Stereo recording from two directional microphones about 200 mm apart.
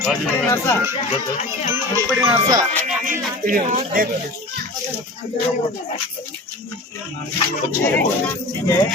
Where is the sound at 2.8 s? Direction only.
40° right (ahead or behind).